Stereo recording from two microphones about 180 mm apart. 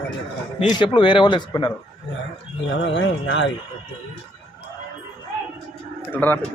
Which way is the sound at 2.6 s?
85° left.